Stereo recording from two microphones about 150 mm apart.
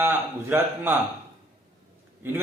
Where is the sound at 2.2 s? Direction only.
15° right (ahead or behind).